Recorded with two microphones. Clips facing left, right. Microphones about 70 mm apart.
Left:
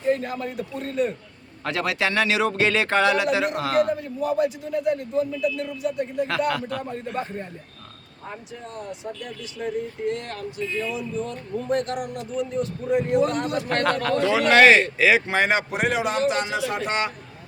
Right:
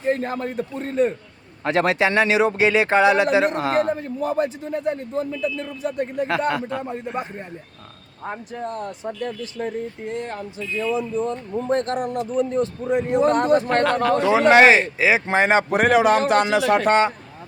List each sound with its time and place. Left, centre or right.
0.0 s a man's voice: right
3.3 s a man's voice: right
6.2 s speech: right
8.3 s speech: right
10.1 s a man's voice: right
12.9 s speech: right
13.3 s a man's voice: right
14.0 s speech: centre
15.7 s speech: right
16.8 s a man's voice: right